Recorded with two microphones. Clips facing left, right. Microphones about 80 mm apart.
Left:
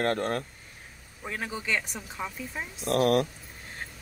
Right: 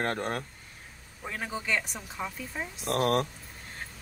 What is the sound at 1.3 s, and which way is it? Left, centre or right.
Speech, centre.